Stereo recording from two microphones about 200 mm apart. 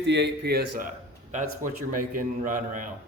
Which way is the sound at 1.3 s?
40° right (ahead or behind).